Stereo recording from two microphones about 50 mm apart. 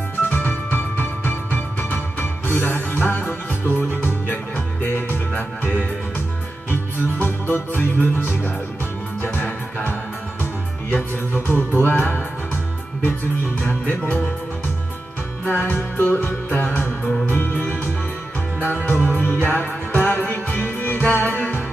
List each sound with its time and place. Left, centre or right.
0.3 s music: left
6.7 s music: left
10.4 s music: left
13.6 s music: left
15.5 s music: left